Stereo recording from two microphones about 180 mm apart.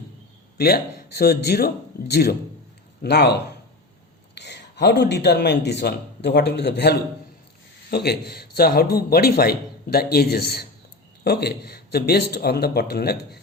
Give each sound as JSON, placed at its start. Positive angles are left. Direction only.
{"t": 0.5, "sound": "a man's voice", "side_deg": 60}